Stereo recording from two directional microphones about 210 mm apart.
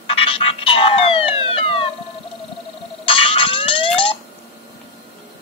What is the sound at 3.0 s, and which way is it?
Fire alarm, 25° left (ahead or behind).